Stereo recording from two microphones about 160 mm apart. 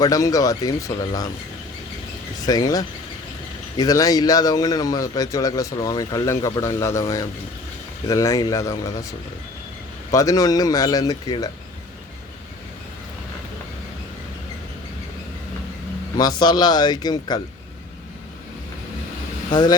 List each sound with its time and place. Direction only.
0.0 s a man's voice: 20° left (ahead or behind)
2.5 s a man's voice: 25° left (ahead or behind)
10.1 s a man's voice: 20° left (ahead or behind)
16.1 s a man's voice: 25° left (ahead or behind)
19.5 s a man's voice: 25° left (ahead or behind)